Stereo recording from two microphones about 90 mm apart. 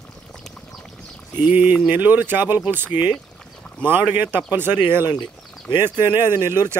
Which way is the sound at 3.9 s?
20° right (ahead or behind).